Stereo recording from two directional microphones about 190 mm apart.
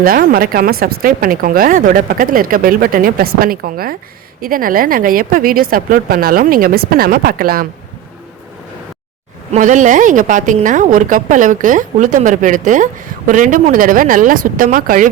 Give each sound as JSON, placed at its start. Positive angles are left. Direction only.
{"t": 0.0, "sound": "a woman's voice", "side_deg": -50}
{"t": 9.5, "sound": "a woman's voice", "side_deg": -40}